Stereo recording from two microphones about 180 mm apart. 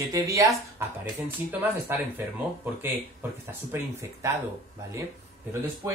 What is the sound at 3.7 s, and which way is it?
Speech, 15° right (ahead or behind).